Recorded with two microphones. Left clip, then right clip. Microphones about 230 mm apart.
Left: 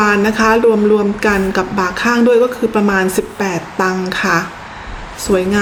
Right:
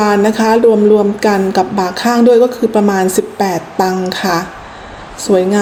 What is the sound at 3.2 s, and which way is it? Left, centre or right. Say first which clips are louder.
A woman's voice: right 3 dB; centre.